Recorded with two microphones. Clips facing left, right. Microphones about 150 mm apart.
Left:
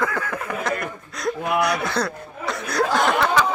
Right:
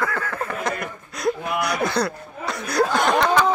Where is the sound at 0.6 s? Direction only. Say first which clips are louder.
Left 1 dB; centre (ahead or behind).